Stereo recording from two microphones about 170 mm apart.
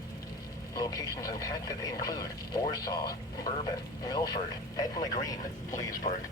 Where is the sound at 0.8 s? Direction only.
20° left (ahead or behind).